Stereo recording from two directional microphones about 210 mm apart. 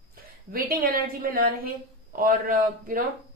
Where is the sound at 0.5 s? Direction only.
45° right (ahead or behind).